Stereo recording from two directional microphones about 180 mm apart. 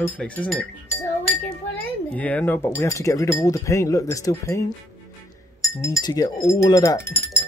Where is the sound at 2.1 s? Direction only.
5° left (ahead or behind).